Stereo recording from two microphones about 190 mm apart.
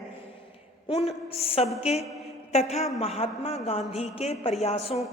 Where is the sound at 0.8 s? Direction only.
30° left (ahead or behind).